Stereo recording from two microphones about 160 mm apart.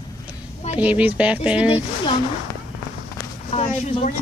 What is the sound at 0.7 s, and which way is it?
Speech, 10° right (ahead or behind).